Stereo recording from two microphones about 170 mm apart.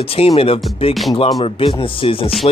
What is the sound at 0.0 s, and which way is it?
A man's voice, 35° left (ahead or behind).